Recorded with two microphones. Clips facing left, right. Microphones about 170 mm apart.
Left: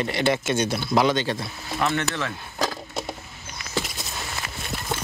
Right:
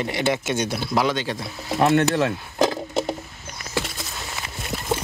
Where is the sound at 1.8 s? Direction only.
45° right (ahead or behind).